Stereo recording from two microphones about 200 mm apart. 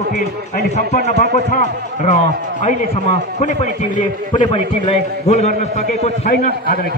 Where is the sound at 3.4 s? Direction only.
35° left (ahead or behind).